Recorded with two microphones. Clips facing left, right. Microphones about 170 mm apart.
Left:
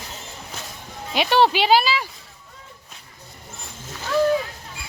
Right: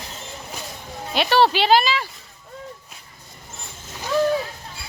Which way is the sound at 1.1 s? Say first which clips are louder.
Even; 15° left (ahead or behind).